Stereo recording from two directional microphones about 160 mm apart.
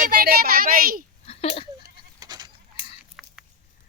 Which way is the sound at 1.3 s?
40° left (ahead or behind).